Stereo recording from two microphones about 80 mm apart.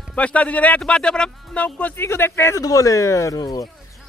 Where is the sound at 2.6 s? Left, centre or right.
Left.